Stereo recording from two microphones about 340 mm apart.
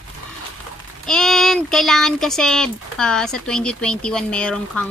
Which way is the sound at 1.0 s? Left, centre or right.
Centre.